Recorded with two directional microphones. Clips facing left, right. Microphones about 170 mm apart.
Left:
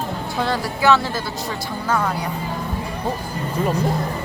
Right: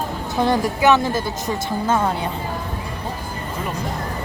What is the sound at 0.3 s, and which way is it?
Speech, 20° right (ahead or behind).